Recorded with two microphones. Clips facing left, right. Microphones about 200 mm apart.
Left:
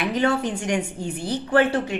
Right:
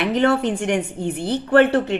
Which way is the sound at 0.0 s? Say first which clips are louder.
Right 4 dB; 60° right (ahead or behind).